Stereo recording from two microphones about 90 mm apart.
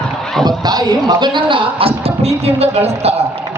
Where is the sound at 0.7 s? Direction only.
50° right (ahead or behind); by 2.1 s 90° right.